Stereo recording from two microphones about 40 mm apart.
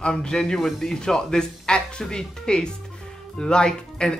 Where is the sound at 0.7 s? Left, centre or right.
Centre.